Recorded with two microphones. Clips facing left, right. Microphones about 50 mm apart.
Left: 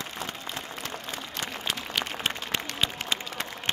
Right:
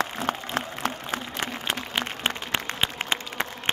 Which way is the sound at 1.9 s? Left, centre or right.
Right.